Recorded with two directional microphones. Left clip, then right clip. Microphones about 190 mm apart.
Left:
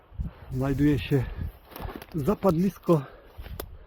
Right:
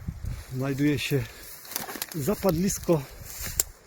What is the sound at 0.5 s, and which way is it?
Speech, 5° left (ahead or behind).